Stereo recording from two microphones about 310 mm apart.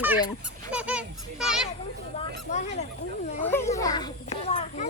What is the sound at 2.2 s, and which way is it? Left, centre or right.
Speech, left.